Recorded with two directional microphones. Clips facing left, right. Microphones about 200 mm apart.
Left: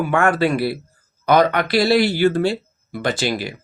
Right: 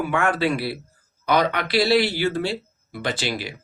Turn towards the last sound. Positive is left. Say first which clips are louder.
# left 5 dB
turn(degrees=45)  # may be behind; listen again after turning